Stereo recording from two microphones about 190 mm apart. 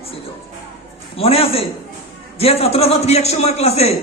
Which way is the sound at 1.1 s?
30° left (ahead or behind).